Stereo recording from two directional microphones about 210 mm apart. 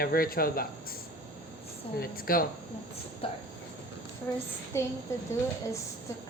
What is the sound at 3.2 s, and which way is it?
Train, 25° left (ahead or behind).